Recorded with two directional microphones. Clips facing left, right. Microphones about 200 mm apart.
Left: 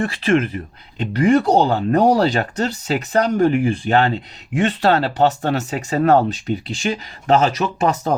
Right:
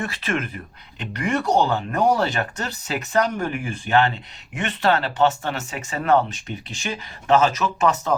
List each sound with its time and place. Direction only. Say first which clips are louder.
0.0 s speech: left 9 dB; 30° left (ahead or behind)
7.3 s speech: left 2 dB; 35° left (ahead or behind)